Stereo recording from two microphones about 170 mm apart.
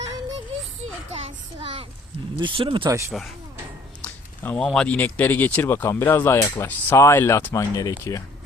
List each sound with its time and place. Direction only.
1.1 s a child's voice: 35° right (ahead or behind)
3.1 s speech: centre (ahead or behind); by 8.2 s 20° left (ahead or behind)